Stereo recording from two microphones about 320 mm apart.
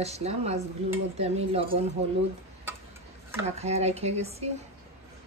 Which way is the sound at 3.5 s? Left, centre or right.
Centre.